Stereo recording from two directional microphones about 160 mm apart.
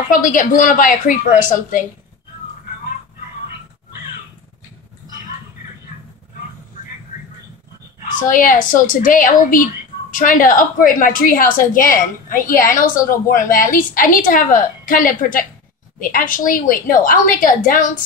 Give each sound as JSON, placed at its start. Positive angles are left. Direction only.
{"t": 0.1, "sound": "a woman's voice", "side_deg": 55}
{"t": 8.2, "sound": "a woman's voice", "side_deg": 60}